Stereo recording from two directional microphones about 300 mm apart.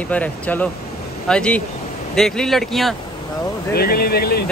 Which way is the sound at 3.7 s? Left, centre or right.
Left.